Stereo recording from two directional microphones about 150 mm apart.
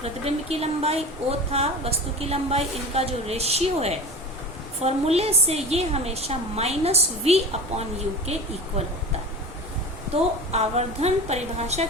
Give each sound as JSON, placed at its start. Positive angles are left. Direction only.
{"t": 0.0, "sound": "a woman's voice", "side_deg": -45}
{"t": 10.5, "sound": "a woman's voice", "side_deg": -45}